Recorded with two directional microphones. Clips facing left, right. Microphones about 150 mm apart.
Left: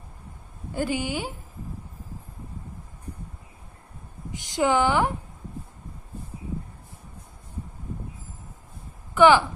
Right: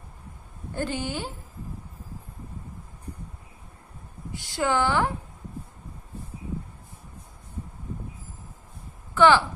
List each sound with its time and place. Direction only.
0.7 s a woman's voice: 10° left (ahead or behind)
4.3 s a woman's voice: 20° left (ahead or behind)
9.1 s a woman's voice: 15° left (ahead or behind)